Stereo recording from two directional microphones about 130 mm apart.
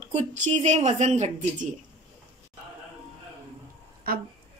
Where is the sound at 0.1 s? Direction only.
65° right (ahead or behind).